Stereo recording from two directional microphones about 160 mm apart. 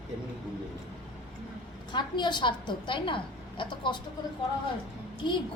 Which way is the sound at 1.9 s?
30° left (ahead or behind).